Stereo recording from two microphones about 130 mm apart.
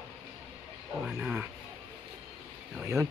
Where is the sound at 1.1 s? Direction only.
10° right (ahead or behind).